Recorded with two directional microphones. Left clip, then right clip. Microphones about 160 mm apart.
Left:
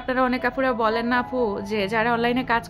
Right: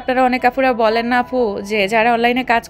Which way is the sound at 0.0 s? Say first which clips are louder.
Right 8 dB; 15° right (ahead or behind).